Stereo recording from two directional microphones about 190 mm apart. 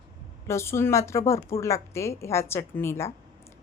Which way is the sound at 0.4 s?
15° left (ahead or behind).